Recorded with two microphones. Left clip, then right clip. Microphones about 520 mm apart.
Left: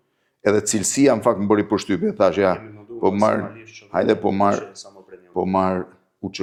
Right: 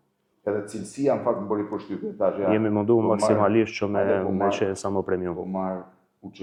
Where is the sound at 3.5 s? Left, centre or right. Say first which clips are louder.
Right 1 dB; right.